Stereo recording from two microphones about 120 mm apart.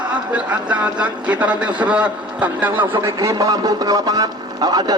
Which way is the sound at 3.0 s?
25° right (ahead or behind).